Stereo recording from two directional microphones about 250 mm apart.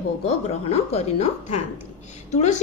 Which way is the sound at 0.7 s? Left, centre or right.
Left.